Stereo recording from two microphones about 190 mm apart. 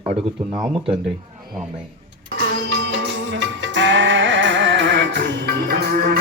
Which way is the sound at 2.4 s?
65° right (ahead or behind).